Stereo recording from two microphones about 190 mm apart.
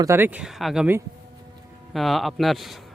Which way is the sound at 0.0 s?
15° right (ahead or behind).